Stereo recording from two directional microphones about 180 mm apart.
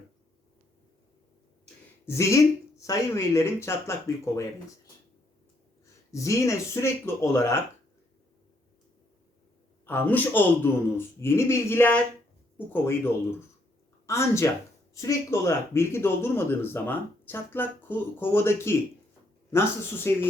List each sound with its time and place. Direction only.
2.0 s speech: 15° left (ahead or behind)
5.8 s speech: 15° left (ahead or behind)
9.8 s speech: 10° left (ahead or behind)
14.1 s speech: 15° left (ahead or behind)